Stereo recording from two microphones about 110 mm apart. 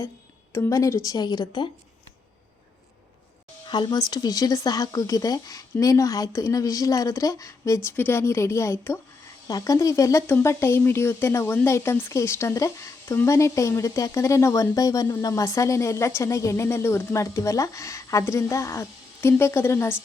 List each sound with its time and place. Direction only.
0.5 s speech: 25° left (ahead or behind)
1.1 s a woman's voice: 40° left (ahead or behind)
3.7 s a woman's voice: 40° left (ahead or behind)
7.9 s speech: 20° left (ahead or behind)